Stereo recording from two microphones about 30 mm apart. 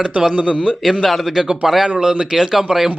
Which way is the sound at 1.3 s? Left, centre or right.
Centre.